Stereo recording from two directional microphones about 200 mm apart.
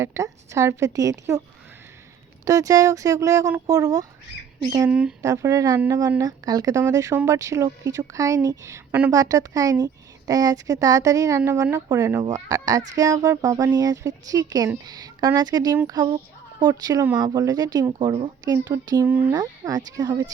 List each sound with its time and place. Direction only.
0.0 s speech: 15° right (ahead or behind)
2.4 s speech: 15° right (ahead or behind)
4.9 s speech: 5° right (ahead or behind)
5.2 s speech: 15° right (ahead or behind)
19.3 s speech: 20° right (ahead or behind)